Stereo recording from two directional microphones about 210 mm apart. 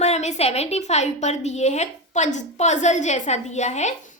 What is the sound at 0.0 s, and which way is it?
A woman's voice, 30° left (ahead or behind).